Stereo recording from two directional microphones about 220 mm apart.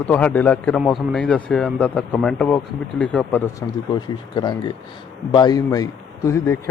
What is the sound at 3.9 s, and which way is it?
Speech, 20° left (ahead or behind).